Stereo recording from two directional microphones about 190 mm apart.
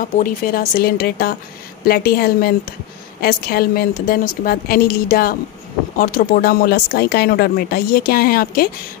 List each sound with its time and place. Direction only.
0.2 s speech: 45° left (ahead or behind)